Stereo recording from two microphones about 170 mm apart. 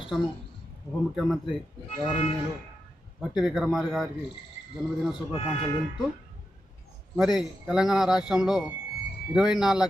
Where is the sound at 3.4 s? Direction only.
5° right (ahead or behind).